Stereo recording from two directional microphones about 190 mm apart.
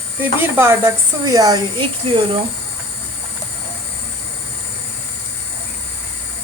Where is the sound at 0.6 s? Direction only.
15° right (ahead or behind).